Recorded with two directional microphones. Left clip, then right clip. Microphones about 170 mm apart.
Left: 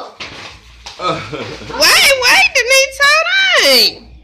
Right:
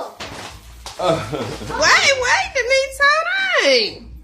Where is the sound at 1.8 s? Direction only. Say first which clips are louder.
Left 5 dB; 15° left (ahead or behind).